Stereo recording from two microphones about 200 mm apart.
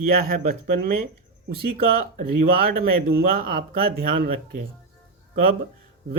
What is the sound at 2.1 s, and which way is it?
Speech, 45° right (ahead or behind).